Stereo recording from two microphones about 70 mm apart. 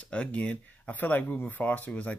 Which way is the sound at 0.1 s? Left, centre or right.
Centre.